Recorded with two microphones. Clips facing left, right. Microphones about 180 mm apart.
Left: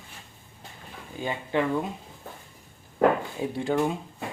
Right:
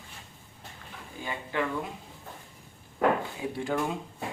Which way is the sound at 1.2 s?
25° left (ahead or behind).